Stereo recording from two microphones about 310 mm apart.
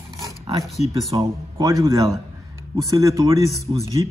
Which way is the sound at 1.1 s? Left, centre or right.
Centre.